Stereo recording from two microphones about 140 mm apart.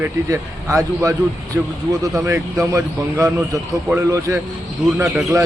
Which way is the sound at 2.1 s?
20° right (ahead or behind).